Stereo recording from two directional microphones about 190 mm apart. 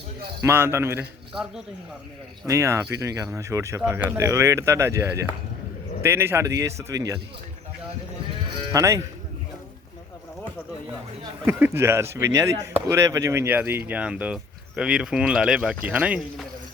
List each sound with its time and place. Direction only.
0.4 s speech: 10° right (ahead or behind)
8.7 s speech: 15° right (ahead or behind)
11.2 s speech: 10° right (ahead or behind)